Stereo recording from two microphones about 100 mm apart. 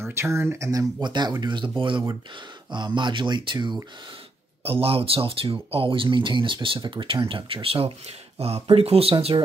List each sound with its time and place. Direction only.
0.0 s speech: 25° right (ahead or behind); by 3.7 s 55° right (ahead or behind)
4.6 s speech: 70° right (ahead or behind)